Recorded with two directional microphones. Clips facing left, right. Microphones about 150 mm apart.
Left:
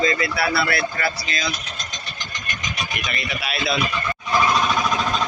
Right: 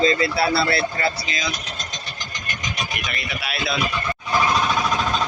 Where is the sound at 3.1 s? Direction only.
Centre (ahead or behind).